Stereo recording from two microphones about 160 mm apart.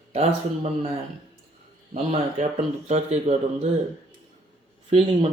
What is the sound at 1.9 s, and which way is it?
Speech, 45° right (ahead or behind).